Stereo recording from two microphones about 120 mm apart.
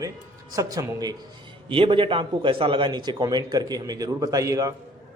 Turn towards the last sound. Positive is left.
turn(degrees=-30)  # may be behind; listen again after turning